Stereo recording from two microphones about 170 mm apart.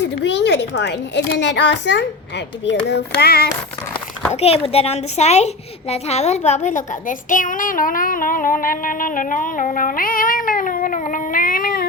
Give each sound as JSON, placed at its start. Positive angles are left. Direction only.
{"t": 0.0, "sound": "speech", "side_deg": 90}
{"t": 2.6, "sound": "a sound", "side_deg": 75}
{"t": 4.4, "sound": "a woman's voice", "side_deg": 35}